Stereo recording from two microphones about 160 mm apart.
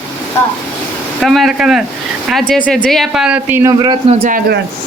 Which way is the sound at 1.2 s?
Centre (ahead or behind).